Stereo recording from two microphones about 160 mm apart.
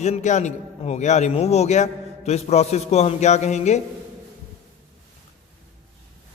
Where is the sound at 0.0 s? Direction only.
45° left (ahead or behind).